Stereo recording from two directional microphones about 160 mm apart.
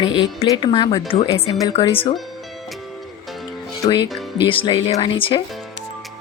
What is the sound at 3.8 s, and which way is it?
Speech, 25° left (ahead or behind).